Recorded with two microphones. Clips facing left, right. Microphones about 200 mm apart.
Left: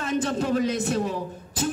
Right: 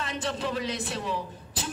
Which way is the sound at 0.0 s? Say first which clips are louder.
Left 6 dB; 45° left (ahead or behind).